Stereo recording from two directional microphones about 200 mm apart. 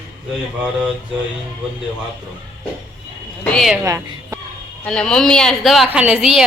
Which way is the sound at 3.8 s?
15° right (ahead or behind).